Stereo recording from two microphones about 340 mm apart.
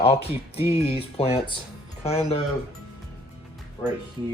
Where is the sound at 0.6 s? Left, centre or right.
Centre.